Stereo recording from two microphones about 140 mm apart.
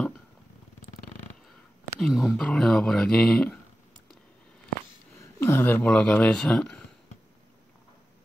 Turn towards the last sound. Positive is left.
turn(degrees=5)  # may be behind; listen again after turning